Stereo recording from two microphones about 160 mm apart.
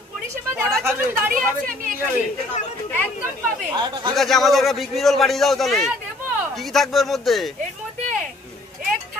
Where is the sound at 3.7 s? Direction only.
25° right (ahead or behind).